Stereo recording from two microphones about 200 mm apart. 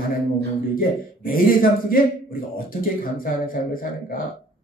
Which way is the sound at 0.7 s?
45° left (ahead or behind).